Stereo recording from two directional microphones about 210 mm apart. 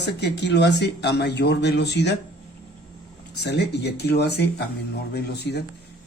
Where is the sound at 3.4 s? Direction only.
55° left (ahead or behind).